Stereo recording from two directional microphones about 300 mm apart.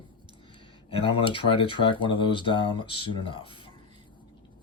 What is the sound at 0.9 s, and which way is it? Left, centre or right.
Speech, centre.